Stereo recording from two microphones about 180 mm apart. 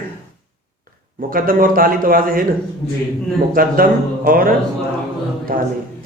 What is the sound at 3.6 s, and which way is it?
Speech, 55° right (ahead or behind).